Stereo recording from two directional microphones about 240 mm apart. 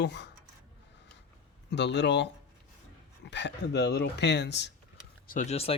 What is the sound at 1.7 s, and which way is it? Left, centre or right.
Speech, left.